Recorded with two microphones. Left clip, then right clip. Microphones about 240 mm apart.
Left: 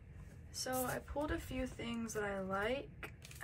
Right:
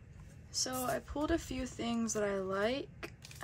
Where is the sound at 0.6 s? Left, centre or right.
Centre.